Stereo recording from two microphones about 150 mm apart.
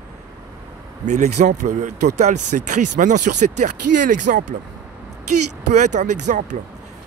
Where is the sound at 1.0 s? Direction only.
50° right (ahead or behind).